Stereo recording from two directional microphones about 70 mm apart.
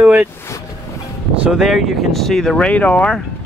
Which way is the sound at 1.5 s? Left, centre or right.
Centre.